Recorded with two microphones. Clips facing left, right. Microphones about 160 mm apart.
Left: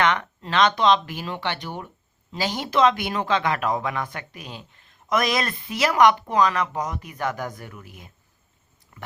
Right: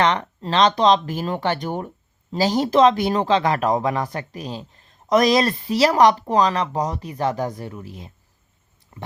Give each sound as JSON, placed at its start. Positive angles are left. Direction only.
{"t": 0.0, "sound": "speech", "side_deg": -35}